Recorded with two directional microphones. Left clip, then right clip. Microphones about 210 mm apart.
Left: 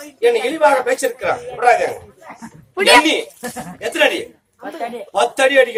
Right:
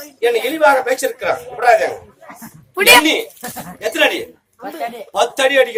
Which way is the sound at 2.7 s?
50° right (ahead or behind).